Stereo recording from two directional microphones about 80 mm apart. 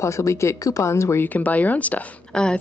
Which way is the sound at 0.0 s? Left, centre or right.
Left.